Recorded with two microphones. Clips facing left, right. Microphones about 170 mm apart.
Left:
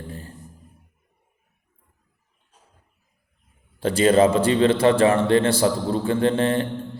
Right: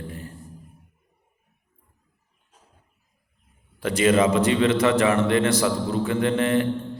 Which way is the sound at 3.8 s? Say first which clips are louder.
Left 3 dB; 30° left (ahead or behind).